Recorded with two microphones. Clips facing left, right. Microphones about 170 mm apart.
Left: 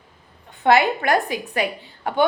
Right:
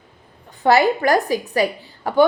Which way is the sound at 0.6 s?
40° right (ahead or behind).